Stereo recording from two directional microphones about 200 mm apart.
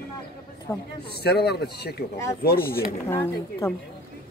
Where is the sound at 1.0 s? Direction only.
55° left (ahead or behind).